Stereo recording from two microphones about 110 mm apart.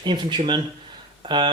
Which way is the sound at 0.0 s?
45° right (ahead or behind).